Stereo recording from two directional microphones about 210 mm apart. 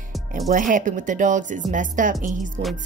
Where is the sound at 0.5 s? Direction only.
40° right (ahead or behind).